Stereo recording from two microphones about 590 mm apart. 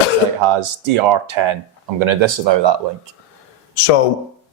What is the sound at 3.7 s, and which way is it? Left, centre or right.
Speech, left.